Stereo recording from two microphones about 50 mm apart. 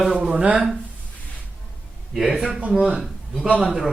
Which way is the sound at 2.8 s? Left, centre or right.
Centre.